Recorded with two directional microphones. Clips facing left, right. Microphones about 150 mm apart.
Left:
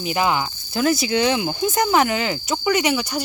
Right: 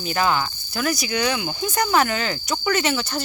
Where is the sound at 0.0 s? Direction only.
15° left (ahead or behind).